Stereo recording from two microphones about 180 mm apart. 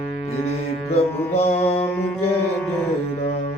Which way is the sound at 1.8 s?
10° left (ahead or behind).